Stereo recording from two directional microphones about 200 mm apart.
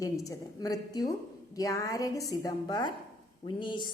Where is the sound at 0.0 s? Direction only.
15° left (ahead or behind).